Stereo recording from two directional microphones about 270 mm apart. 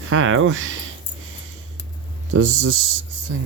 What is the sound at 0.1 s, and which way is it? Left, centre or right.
Speech, right.